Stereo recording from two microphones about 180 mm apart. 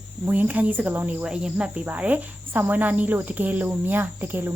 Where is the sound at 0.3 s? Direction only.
10° right (ahead or behind).